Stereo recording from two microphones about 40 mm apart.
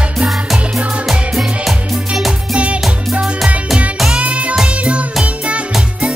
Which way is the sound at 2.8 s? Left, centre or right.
Centre.